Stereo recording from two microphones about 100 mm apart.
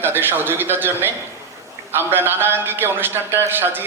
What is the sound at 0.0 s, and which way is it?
A man's voice, 20° right (ahead or behind).